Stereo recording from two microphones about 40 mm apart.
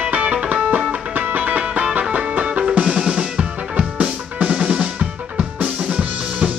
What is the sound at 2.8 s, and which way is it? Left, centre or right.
Drum, centre.